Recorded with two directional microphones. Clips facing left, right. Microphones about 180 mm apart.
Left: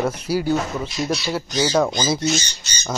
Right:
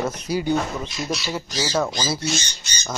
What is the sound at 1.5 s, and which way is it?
Speech, 20° left (ahead or behind).